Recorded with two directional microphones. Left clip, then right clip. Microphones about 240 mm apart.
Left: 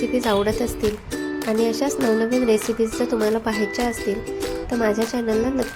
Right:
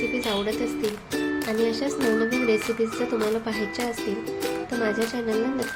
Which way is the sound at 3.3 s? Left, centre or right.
Left.